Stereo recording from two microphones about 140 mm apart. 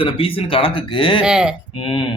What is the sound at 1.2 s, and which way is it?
Speech, 5° right (ahead or behind).